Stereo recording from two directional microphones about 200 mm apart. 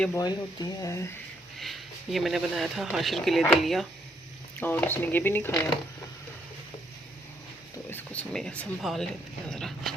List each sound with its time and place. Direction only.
0.1 s speech: 20° left (ahead or behind)
1.5 s speech: centre (ahead or behind)
7.9 s speech: 10° left (ahead or behind)